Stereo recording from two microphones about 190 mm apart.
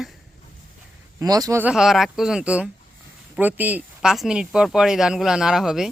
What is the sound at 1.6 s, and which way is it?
Speech, 5° right (ahead or behind).